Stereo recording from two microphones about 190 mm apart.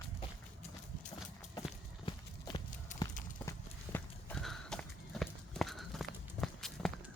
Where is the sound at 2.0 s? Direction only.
25° left (ahead or behind).